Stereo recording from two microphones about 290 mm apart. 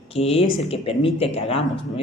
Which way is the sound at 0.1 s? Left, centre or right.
Centre.